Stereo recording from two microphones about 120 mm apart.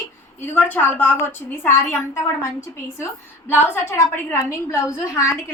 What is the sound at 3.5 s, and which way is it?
A woman's voice, 20° left (ahead or behind).